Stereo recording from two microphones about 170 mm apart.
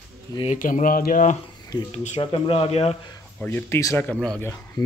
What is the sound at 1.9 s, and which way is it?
Speech, 35° left (ahead or behind).